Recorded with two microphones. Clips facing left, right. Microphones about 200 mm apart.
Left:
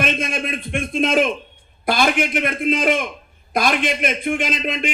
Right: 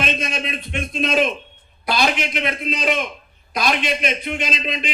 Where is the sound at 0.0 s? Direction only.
50° left (ahead or behind).